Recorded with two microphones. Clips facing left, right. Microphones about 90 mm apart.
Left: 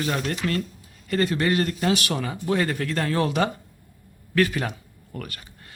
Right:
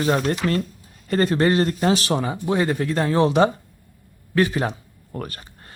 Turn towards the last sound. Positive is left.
turn(degrees=-35)  # may be behind; listen again after turning